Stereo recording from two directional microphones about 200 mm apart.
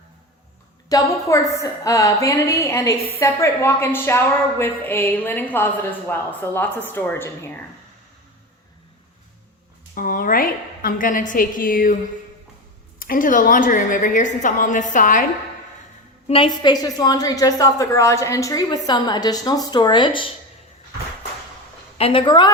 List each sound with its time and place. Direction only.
0.9 s a woman's voice: 15° left (ahead or behind)
9.9 s a woman's voice: 45° left (ahead or behind)
13.0 s a woman's voice: 45° left (ahead or behind)
16.2 s a woman's voice: 30° left (ahead or behind)
21.9 s a woman's voice: 30° left (ahead or behind)